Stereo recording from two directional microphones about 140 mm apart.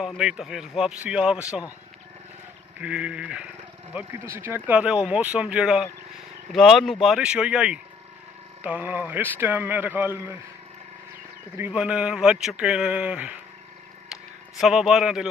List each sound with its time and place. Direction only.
0.0 s speech: 5° right (ahead or behind)
2.8 s speech: 10° right (ahead or behind)
3.9 s speech: 20° right (ahead or behind)
4.6 s speech: 10° right (ahead or behind)
11.5 s speech: 10° right (ahead or behind)
14.6 s speech: centre (ahead or behind)